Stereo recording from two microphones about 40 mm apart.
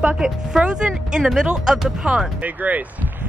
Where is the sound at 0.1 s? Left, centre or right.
Centre.